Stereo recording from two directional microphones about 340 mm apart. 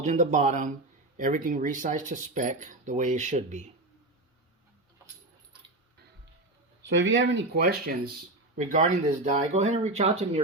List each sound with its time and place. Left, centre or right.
0.0 s speech: right
6.8 s speech: right